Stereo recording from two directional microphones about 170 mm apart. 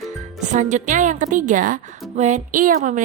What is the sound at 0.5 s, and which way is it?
A woman's voice, 45° right (ahead or behind).